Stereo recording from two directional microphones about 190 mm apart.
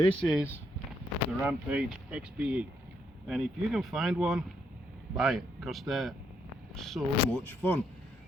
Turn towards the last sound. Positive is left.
turn(degrees=5)  # may be behind; listen again after turning